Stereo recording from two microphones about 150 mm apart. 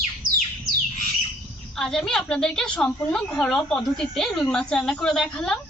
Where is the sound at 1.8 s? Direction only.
5° left (ahead or behind).